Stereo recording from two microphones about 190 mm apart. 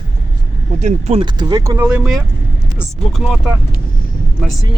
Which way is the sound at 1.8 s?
5° right (ahead or behind).